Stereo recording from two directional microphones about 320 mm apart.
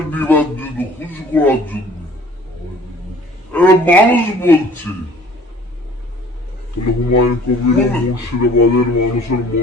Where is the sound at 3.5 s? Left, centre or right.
Centre.